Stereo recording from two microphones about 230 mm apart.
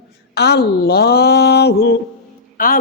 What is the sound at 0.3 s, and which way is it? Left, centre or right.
A man's voice, left.